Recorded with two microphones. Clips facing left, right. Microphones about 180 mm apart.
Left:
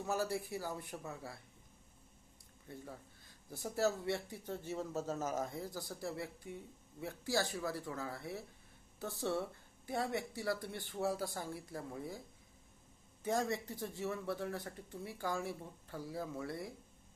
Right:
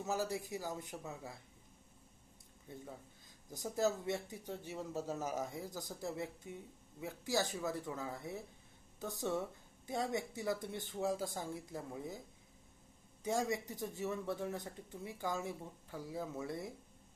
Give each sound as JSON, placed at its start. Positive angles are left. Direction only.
{"t": 0.0, "sound": "speech", "side_deg": -15}
{"t": 3.5, "sound": "speech", "side_deg": -15}
{"t": 13.2, "sound": "speech", "side_deg": -15}